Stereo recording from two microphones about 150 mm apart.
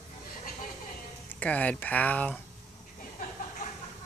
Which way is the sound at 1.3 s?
10° left (ahead or behind).